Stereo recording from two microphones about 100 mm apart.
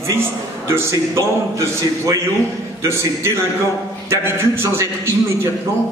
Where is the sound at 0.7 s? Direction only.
30° right (ahead or behind).